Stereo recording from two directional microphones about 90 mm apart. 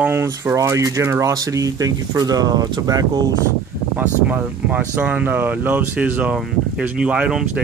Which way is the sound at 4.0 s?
15° right (ahead or behind).